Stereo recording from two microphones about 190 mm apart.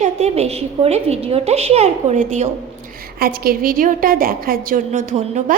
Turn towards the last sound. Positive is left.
turn(degrees=-40)  # may be behind; listen again after turning